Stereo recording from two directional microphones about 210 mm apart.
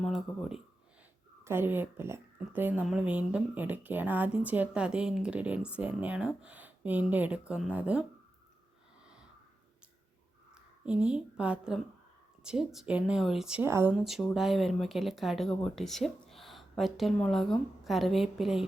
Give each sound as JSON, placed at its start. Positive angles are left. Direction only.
{"t": 0.0, "sound": "speech", "side_deg": 0}
{"t": 10.5, "sound": "a woman's voice", "side_deg": -5}